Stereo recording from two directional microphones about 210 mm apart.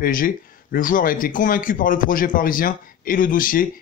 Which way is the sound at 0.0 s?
40° left (ahead or behind).